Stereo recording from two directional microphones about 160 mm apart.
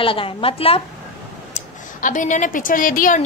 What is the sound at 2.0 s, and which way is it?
A woman's voice, 55° left (ahead or behind).